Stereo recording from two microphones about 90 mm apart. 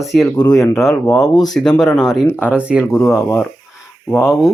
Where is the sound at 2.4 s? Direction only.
15° right (ahead or behind).